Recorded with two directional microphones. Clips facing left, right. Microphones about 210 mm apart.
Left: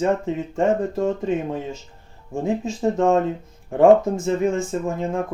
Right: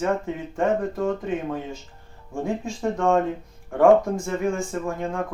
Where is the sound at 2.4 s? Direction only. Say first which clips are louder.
Left 4 dB; 20° left (ahead or behind).